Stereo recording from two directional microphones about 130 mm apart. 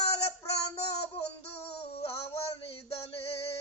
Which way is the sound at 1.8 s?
50° left (ahead or behind).